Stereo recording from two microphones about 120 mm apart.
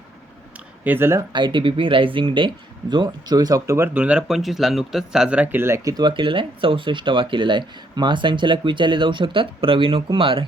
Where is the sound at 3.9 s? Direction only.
10° right (ahead or behind).